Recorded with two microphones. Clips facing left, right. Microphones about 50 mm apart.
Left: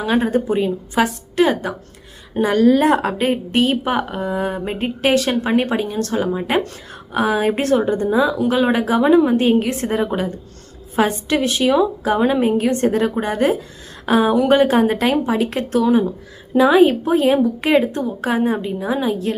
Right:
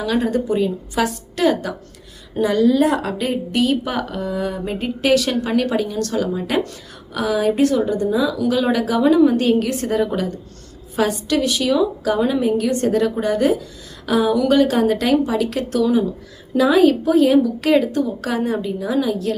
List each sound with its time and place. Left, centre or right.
0.0 s a woman's voice: left